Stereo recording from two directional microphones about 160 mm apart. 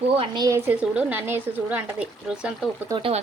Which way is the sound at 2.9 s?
30° right (ahead or behind).